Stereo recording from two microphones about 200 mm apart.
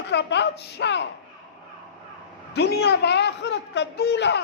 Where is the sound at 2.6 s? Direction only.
55° left (ahead or behind).